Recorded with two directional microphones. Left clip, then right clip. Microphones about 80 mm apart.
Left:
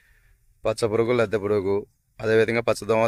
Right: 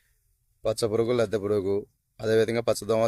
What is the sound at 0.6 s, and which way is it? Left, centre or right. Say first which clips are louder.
Speech: left 3 dB; centre.